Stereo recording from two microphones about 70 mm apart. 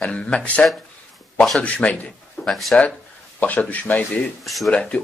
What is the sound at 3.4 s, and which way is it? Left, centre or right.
Speech, left.